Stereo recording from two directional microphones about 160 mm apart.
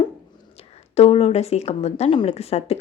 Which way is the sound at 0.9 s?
40° left (ahead or behind).